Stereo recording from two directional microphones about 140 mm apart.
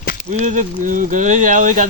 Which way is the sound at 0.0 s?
90° left.